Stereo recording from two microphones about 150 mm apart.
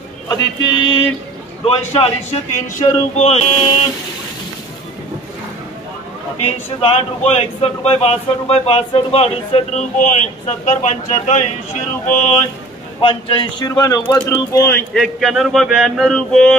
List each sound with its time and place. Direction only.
0.3 s speech: 30° left (ahead or behind)
1.6 s a man's voice: 45° left (ahead or behind)
2.5 s speech: 55° left (ahead or behind)
6.4 s speech: 45° left (ahead or behind)
13.0 s speech: 35° left (ahead or behind); by 14.8 s 15° left (ahead or behind)
15.0 s speech: centre (ahead or behind)